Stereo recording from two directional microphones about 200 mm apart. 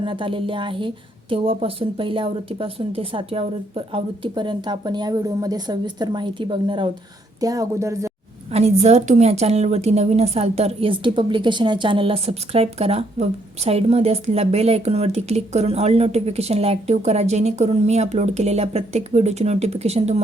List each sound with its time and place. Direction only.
0.0 s a woman's voice: 25° right (ahead or behind)
8.5 s speech: 30° right (ahead or behind)